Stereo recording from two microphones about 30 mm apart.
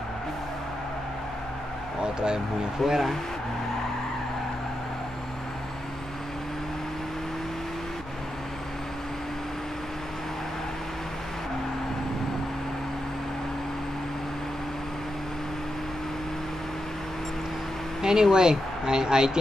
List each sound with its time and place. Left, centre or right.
2.0 s speech: right
2.8 s speech: centre
18.0 s speech: right